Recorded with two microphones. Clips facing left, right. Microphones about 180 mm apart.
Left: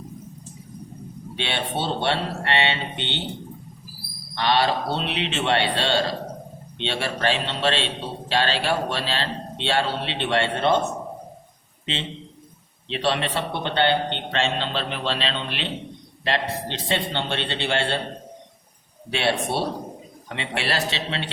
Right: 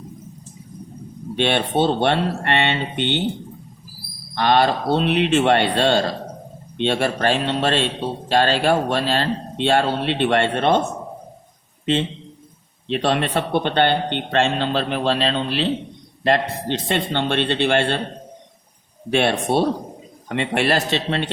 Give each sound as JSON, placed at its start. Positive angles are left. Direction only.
{"t": 1.4, "sound": "a man's voice", "side_deg": -55}
{"t": 4.4, "sound": "a man's voice", "side_deg": -50}
{"t": 12.9, "sound": "a man's voice", "side_deg": -50}
{"t": 16.2, "sound": "a man's voice", "side_deg": -50}
{"t": 19.1, "sound": "a man's voice", "side_deg": -50}